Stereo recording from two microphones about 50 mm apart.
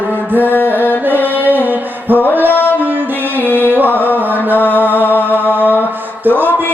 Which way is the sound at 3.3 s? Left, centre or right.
Right.